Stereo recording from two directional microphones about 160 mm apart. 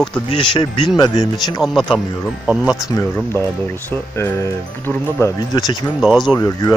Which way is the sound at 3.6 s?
15° left (ahead or behind).